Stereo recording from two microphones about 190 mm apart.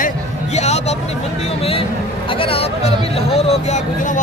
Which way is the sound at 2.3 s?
30° left (ahead or behind).